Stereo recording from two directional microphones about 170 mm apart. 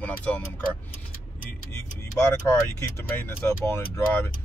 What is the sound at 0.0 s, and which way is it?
Vehicle, 10° left (ahead or behind).